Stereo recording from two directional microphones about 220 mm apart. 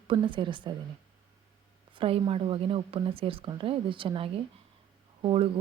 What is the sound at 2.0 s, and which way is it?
Speech, 25° right (ahead or behind).